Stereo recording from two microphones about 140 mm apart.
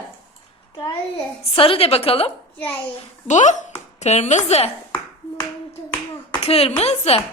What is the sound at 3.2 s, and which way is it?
A woman's voice, 60° left (ahead or behind).